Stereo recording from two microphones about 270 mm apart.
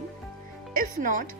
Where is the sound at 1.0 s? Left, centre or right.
Right.